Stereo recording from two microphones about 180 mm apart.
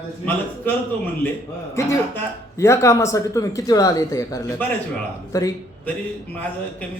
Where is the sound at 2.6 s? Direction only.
15° left (ahead or behind).